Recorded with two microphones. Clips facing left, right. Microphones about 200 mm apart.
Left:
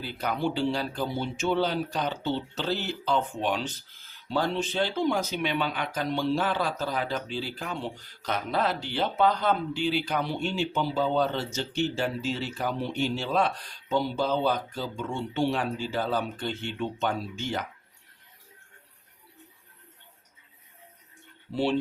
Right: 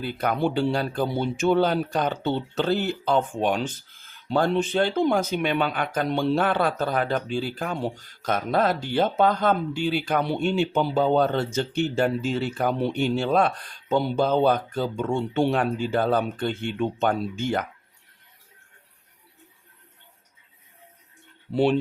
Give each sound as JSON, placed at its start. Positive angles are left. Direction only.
{"t": 0.0, "sound": "speech", "side_deg": -55}
{"t": 21.5, "sound": "speech", "side_deg": -60}